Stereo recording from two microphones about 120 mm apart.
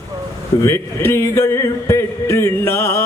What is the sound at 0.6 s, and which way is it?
Speech, 20° left (ahead or behind).